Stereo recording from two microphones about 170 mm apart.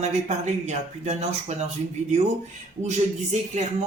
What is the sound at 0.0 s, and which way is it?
Speech, 45° right (ahead or behind).